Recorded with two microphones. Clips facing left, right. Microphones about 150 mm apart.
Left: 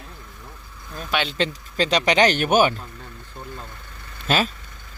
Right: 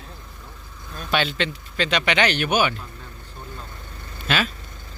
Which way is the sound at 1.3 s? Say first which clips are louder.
Left 2 dB; 35° left (ahead or behind).